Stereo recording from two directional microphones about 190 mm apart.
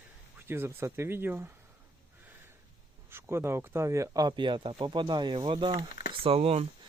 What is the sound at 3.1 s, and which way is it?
Speech, 15° right (ahead or behind).